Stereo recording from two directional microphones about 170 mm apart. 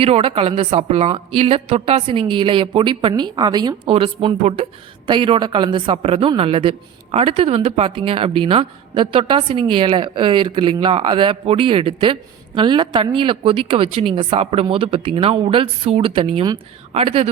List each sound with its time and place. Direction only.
0.0 s a woman's voice: 35° right (ahead or behind)